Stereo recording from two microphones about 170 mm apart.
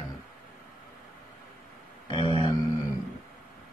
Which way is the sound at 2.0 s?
30° left (ahead or behind).